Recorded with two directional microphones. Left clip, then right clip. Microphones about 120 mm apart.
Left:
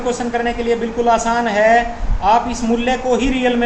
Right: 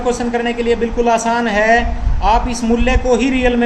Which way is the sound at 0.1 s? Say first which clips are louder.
Right 1 dB; 45° right (ahead or behind).